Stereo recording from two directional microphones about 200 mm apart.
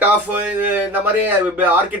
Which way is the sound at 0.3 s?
10° right (ahead or behind).